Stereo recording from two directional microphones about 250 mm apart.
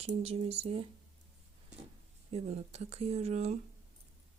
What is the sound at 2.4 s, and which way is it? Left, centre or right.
Speech, right.